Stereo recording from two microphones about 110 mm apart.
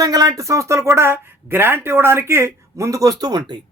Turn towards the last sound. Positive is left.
turn(degrees=-35)  # may be behind; listen again after turning